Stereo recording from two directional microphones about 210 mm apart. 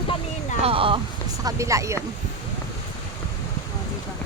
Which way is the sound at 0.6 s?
25° right (ahead or behind).